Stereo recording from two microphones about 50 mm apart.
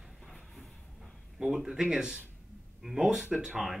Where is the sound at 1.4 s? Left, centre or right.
Centre.